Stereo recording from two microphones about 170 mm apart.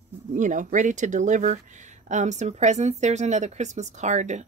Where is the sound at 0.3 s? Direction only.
50° right (ahead or behind).